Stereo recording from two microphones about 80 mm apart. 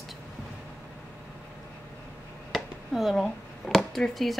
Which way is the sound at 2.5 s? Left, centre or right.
Centre.